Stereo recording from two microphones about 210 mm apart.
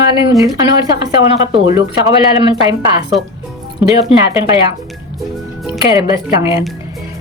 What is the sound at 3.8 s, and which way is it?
Speech, 20° right (ahead or behind).